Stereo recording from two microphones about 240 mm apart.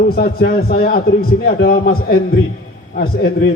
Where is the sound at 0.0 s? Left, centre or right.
Left.